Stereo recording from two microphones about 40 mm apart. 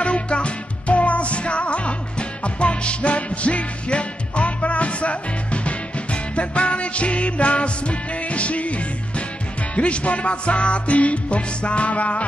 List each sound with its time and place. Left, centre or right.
0.0 s music: left